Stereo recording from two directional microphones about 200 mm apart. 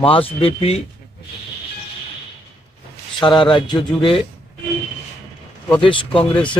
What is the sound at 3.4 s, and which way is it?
Speech, 25° left (ahead or behind).